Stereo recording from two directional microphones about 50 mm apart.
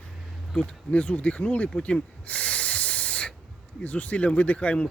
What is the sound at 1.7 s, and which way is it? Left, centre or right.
Snake, left.